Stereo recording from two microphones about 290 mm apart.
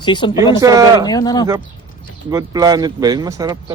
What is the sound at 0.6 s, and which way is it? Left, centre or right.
Speech, centre.